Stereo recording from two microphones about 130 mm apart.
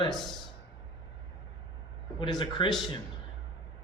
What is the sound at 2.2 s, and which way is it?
Speech, 35° left (ahead or behind).